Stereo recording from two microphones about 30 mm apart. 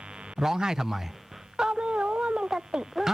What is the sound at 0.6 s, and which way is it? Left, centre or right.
Speech, centre.